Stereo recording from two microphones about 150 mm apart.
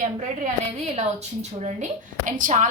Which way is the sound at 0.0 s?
60° right (ahead or behind).